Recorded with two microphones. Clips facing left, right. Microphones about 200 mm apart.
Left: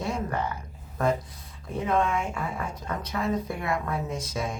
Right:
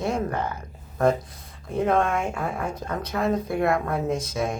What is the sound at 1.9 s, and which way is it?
Speech, 50° right (ahead or behind).